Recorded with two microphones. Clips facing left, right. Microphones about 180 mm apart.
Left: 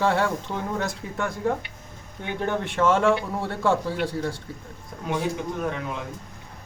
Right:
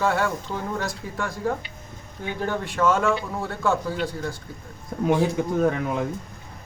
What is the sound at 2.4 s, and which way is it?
A man's voice, 25° left (ahead or behind).